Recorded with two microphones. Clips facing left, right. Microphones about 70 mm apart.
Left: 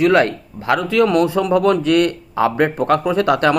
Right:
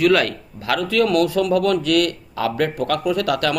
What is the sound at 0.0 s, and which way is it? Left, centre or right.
Speech, left.